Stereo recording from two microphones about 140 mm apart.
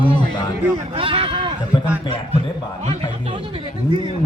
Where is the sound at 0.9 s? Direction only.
40° right (ahead or behind).